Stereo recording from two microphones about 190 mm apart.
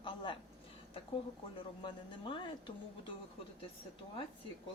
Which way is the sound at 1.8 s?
25° left (ahead or behind).